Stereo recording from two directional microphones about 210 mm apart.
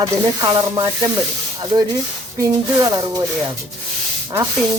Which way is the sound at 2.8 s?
20° right (ahead or behind).